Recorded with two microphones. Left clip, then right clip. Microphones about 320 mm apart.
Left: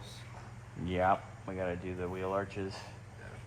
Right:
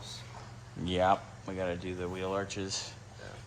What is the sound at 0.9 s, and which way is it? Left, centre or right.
Speech, centre.